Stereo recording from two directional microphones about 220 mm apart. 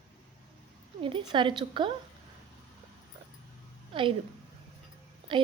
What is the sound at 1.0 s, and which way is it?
Speech, 20° right (ahead or behind).